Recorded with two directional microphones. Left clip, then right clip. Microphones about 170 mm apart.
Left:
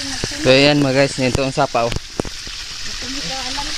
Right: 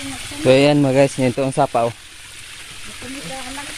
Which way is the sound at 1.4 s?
5° right (ahead or behind).